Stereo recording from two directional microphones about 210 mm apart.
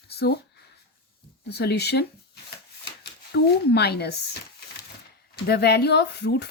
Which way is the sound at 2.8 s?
50° left (ahead or behind).